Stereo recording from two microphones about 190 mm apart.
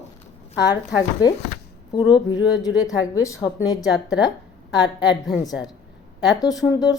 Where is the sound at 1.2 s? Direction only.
20° left (ahead or behind).